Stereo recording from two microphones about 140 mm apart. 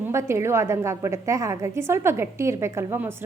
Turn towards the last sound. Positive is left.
turn(degrees=-15)  # may be behind; listen again after turning